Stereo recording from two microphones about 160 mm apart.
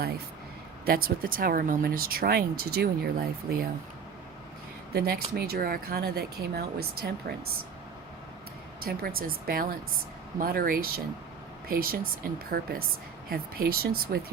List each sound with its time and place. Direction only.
0.9 s speech: 70° right (ahead or behind)
4.9 s speech: 75° right (ahead or behind)
8.8 s speech: 70° right (ahead or behind)
12.5 s speech: 75° right (ahead or behind)